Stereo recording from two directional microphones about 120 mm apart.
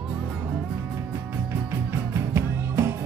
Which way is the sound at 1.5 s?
20° right (ahead or behind).